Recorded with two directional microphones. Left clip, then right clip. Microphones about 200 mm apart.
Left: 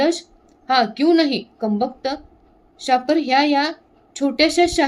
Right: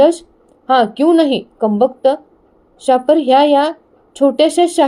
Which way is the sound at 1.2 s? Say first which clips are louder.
Right 6 dB; 20° left (ahead or behind).